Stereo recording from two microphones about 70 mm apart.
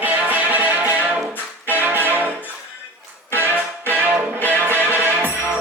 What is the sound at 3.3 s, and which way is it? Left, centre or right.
Music, right.